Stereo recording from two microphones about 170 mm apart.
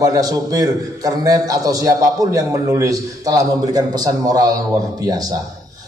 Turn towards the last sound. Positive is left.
turn(degrees=-20)  # may be behind; listen again after turning